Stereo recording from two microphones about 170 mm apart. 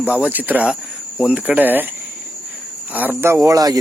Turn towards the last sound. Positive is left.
turn(degrees=-20)  # may be behind; listen again after turning